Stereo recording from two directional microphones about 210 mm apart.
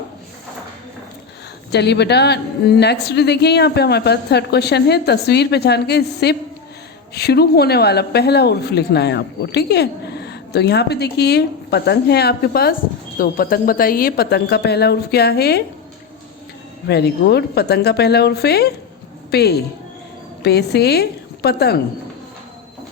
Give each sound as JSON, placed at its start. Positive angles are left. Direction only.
{"t": 1.7, "sound": "speech", "side_deg": 55}
{"t": 16.9, "sound": "a woman's voice", "side_deg": 50}